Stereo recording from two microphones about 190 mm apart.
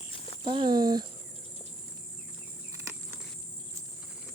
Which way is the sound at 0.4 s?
25° right (ahead or behind).